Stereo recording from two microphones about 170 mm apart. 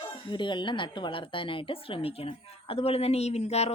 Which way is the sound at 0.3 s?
25° left (ahead or behind).